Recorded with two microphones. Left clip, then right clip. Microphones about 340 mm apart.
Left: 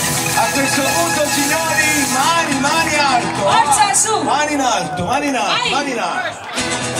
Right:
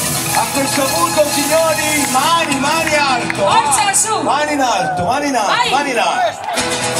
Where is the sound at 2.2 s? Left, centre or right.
Centre.